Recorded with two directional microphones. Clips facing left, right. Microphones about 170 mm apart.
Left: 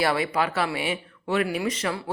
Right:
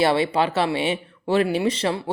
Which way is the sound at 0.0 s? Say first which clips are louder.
Right 4 dB; 25° right (ahead or behind).